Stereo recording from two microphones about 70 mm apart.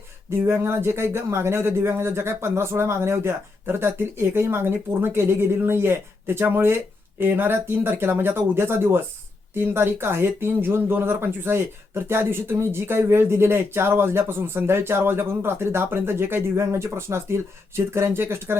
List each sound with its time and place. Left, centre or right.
0.3 s speech: right